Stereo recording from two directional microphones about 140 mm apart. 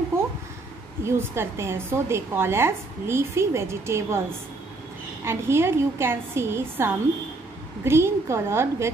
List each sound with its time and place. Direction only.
0.1 s a sound: 20° right (ahead or behind)
1.0 s a woman's voice: 20° right (ahead or behind)
5.2 s a woman's voice: 15° right (ahead or behind)